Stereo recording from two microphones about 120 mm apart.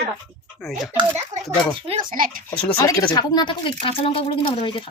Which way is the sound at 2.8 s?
30° left (ahead or behind).